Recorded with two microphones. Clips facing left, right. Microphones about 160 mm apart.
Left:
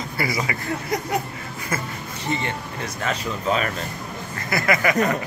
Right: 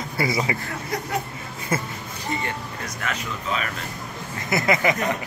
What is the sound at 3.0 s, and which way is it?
Speech, 35° left (ahead or behind).